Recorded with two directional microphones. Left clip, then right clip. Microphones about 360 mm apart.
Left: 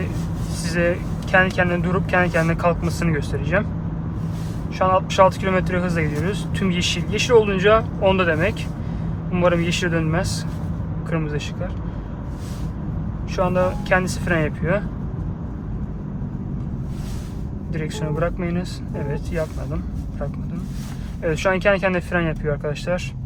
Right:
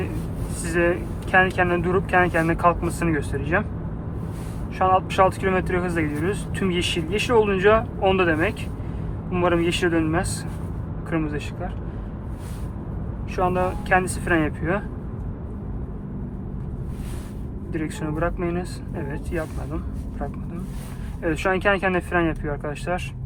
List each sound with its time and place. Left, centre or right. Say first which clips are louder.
0.6 s speech: even; centre
4.8 s speech: left 2 dB; centre
13.3 s speech: left 2 dB; centre
17.7 s speech: left 2 dB; centre
21.2 s speech: left 3 dB; centre